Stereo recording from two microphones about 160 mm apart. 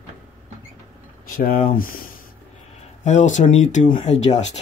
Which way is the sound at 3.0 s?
45° left (ahead or behind).